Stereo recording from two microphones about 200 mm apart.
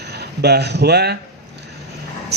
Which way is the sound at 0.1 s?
55° right (ahead or behind).